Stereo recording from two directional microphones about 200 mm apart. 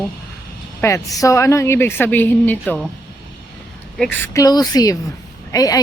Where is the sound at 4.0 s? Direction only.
10° left (ahead or behind).